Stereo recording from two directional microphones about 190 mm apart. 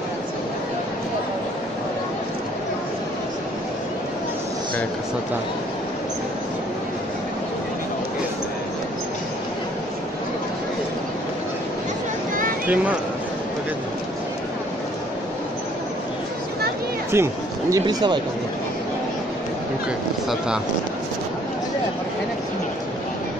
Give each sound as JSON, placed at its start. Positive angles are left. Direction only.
{"t": 12.6, "sound": "speech", "side_deg": -10}
{"t": 17.1, "sound": "speech", "side_deg": -15}
{"t": 20.2, "sound": "speech", "side_deg": -5}